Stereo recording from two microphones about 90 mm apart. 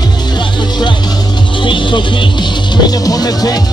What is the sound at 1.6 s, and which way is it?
Music, 65° left (ahead or behind).